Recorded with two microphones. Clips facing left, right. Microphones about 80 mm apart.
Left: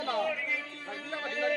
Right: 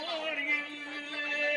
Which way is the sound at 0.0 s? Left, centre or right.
Left.